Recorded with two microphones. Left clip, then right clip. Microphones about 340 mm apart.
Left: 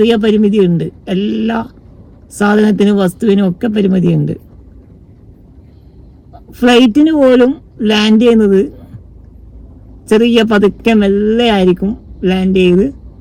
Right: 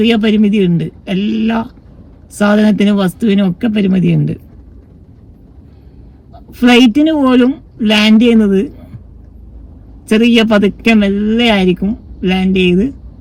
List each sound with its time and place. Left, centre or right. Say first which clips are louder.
0.0 s speech: left 2 dB; centre
6.5 s speech: even; centre
10.1 s speech: left 1 dB; centre